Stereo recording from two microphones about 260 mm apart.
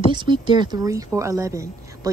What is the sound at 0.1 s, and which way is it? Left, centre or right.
Speech, centre.